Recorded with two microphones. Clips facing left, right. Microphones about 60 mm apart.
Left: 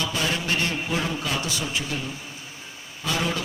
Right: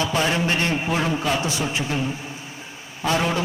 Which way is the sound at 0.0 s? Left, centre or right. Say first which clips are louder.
Right 5 dB; right.